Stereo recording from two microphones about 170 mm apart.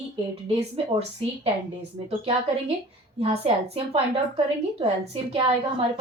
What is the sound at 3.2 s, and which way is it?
A woman's voice, 35° right (ahead or behind).